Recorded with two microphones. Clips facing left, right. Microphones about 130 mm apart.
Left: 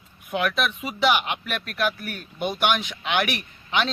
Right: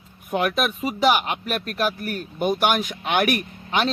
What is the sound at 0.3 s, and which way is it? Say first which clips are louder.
Speech: right 2 dB; 40° right (ahead or behind).